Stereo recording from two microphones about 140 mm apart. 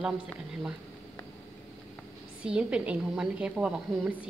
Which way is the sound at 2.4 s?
5° right (ahead or behind).